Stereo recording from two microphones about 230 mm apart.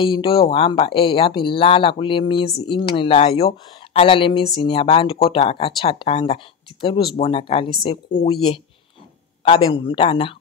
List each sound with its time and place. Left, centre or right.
0.0 s speech: left